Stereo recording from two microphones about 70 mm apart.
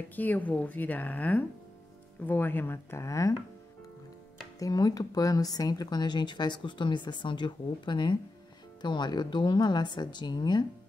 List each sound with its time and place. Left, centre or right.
0.1 s a woman's voice: left
4.6 s speech: left